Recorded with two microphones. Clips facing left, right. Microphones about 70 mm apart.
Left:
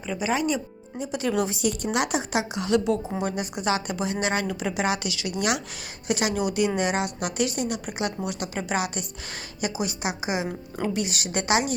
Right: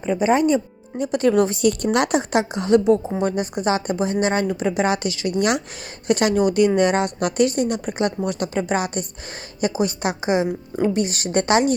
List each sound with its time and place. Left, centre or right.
0.2 s a woman's voice: right
0.9 s a woman's voice: right